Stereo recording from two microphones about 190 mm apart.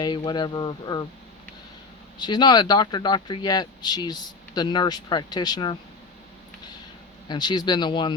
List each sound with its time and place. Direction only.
0.0 s speech: 20° left (ahead or behind)
2.1 s speech: 25° left (ahead or behind)
7.3 s speech: 20° left (ahead or behind)